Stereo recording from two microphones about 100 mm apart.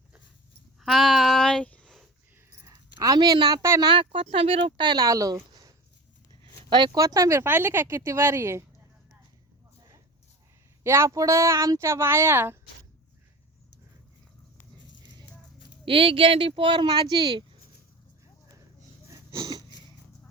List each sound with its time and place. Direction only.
0.8 s a sound: centre (ahead or behind)
2.5 s a sound: 30° right (ahead or behind); by 3.6 s 45° right (ahead or behind)
3.8 s speech: 50° right (ahead or behind); by 4.7 s 70° right (ahead or behind)
4.8 s speech: 50° right (ahead or behind)
5.0 s speech: 35° right (ahead or behind)
6.7 s speech: 50° right (ahead or behind)
7.0 s speech: 35° right (ahead or behind)
10.8 s speech: 25° right (ahead or behind)
15.9 s speech: 60° right (ahead or behind); by 17.4 s 45° right (ahead or behind)
19.1 s a sound: 30° right (ahead or behind)